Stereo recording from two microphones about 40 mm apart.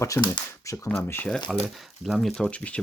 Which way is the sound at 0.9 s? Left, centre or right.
Left.